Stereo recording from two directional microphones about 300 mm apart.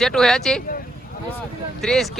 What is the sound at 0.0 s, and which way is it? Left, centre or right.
Speech, centre.